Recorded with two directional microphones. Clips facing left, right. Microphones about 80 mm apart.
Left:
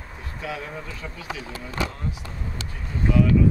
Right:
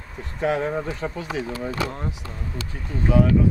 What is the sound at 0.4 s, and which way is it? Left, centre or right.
Speech, right.